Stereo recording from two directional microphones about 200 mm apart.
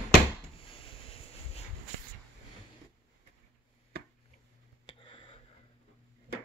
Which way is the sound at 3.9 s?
50° right (ahead or behind).